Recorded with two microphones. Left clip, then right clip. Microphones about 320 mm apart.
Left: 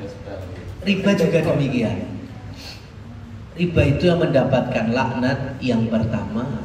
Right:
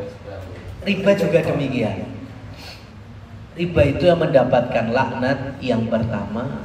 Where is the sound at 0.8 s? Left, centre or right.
Centre.